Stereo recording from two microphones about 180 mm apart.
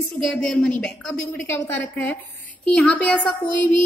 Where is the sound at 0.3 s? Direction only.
5° left (ahead or behind).